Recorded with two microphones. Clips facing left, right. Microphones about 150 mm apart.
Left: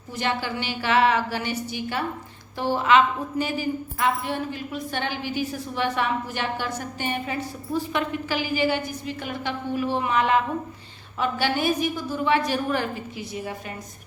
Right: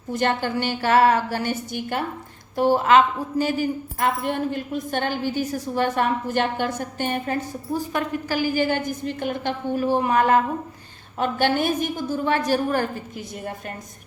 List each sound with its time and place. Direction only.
0.1 s a woman's voice: 50° right (ahead or behind)
2.6 s a woman's voice: 40° right (ahead or behind)